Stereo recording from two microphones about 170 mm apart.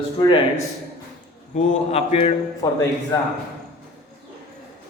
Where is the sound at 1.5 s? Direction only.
40° left (ahead or behind).